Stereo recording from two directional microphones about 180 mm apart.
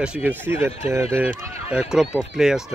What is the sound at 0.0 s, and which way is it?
Speech, 5° right (ahead or behind).